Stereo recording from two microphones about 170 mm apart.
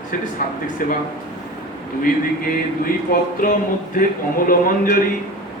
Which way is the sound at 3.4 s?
55° left (ahead or behind).